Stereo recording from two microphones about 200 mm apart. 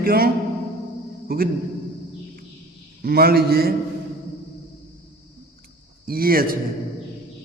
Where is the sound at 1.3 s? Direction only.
50° right (ahead or behind).